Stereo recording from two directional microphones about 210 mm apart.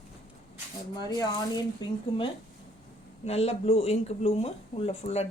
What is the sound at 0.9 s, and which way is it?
Speech, 20° left (ahead or behind).